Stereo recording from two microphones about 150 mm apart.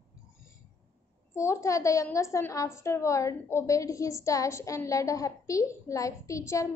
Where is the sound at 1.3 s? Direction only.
20° left (ahead or behind).